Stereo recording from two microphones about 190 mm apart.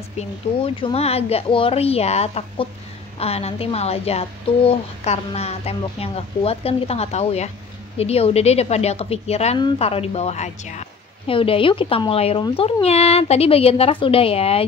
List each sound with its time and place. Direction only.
0.7 s a woman's voice: 30° left (ahead or behind)